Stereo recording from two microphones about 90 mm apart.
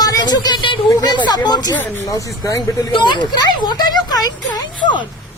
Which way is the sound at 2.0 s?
35° left (ahead or behind).